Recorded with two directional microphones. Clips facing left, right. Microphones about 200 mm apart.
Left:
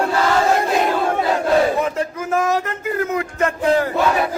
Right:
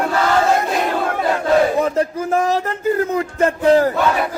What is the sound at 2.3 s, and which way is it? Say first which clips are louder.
A man's voice: left 1 dB; 30° right (ahead or behind).